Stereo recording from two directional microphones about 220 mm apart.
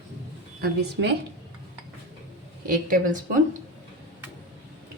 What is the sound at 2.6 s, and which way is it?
Speech, 40° right (ahead or behind).